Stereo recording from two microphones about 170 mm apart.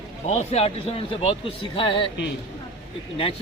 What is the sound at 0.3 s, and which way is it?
Speech, 35° left (ahead or behind).